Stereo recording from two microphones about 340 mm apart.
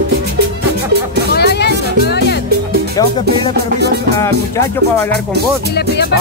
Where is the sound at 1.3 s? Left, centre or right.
Left.